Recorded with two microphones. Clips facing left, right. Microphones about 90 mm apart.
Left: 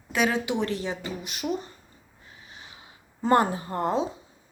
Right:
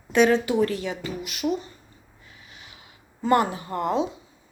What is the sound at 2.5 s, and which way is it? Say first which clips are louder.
Snort: left 2 dB; 30° left (ahead or behind).